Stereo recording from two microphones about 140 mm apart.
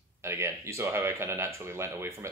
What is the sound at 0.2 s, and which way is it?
Speech, 20° right (ahead or behind).